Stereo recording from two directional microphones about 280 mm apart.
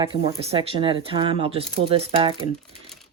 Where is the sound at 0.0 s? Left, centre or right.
Centre.